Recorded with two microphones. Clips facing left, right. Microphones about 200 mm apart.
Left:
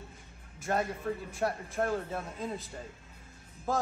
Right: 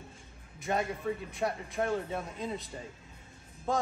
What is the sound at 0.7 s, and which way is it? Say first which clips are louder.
A man's voice: even; centre (ahead or behind).